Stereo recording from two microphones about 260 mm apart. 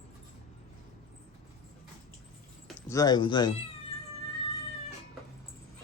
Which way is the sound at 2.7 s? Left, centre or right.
Centre.